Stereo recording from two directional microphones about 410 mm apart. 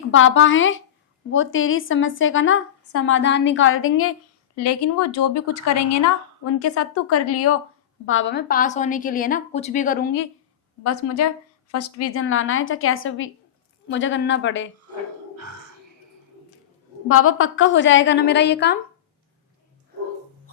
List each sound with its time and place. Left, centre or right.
0.1 s a woman's voice: left
10.8 s a woman's voice: left
17.1 s a woman's voice: left